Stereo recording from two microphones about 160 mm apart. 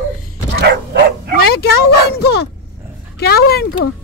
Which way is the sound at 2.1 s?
90° left.